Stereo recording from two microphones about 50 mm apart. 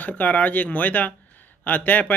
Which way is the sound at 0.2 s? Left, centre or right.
Left.